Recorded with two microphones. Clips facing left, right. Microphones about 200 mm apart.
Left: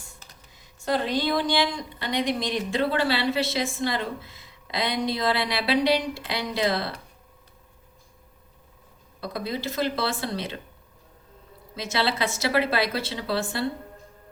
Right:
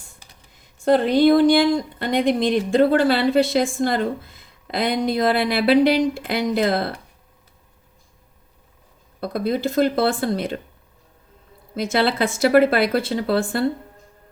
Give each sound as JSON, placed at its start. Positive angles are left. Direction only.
{"t": 0.5, "sound": "speech", "side_deg": -50}
{"t": 9.2, "sound": "speech", "side_deg": -55}
{"t": 11.8, "sound": "speech", "side_deg": -55}